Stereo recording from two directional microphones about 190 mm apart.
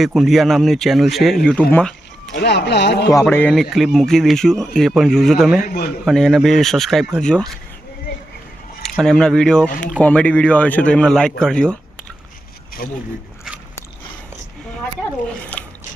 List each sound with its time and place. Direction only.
0.0 s a man's voice: centre (ahead or behind)
1.7 s a sound: 5° left (ahead or behind)
2.3 s speech: 60° left (ahead or behind)
3.2 s a man's voice: 5° left (ahead or behind)
5.6 s a man's voice: 50° left (ahead or behind)
6.1 s a man's voice: centre (ahead or behind)
8.8 s speech: 5° left (ahead or behind)
12.8 s a man's voice: 55° left (ahead or behind)
15.5 s drip: 5° left (ahead or behind)